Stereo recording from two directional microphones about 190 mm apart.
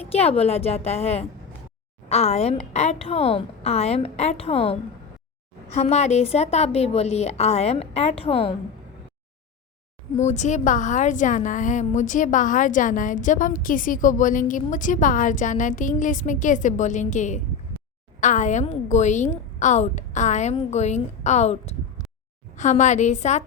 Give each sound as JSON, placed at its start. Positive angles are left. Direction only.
{"t": 0.0, "sound": "a woman's voice", "side_deg": 30}
{"t": 10.2, "sound": "a woman's voice", "side_deg": 40}